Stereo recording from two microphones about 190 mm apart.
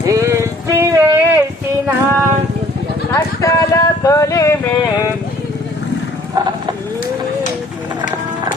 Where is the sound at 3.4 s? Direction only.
15° left (ahead or behind).